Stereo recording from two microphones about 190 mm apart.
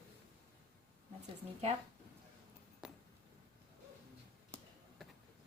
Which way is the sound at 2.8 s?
Centre (ahead or behind).